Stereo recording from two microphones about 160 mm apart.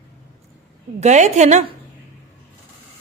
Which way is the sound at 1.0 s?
45° right (ahead or behind).